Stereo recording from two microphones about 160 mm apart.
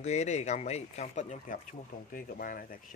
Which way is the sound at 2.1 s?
60° left (ahead or behind).